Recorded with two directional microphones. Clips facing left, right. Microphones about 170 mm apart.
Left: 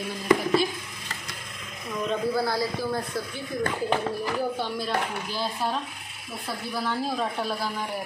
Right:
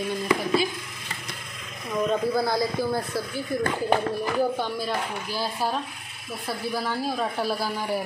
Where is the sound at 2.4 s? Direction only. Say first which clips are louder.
Right 2 dB; 15° right (ahead or behind).